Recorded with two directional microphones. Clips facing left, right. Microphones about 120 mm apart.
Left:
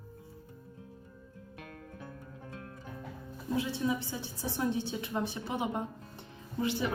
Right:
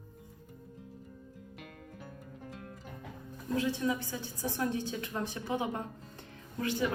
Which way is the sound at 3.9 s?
20° left (ahead or behind).